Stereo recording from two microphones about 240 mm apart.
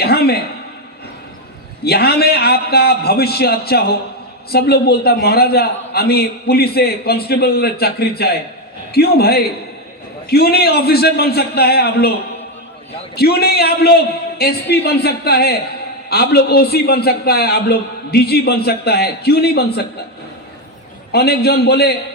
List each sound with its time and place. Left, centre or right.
0.0 s a sound: left
1.8 s a man's voice: left
13.1 s a man's voice: left
21.1 s a man's voice: left